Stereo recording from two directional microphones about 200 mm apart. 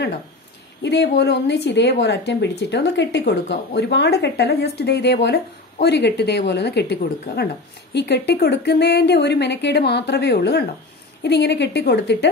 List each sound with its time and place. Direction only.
0.8 s a woman's voice: 60° left (ahead or behind)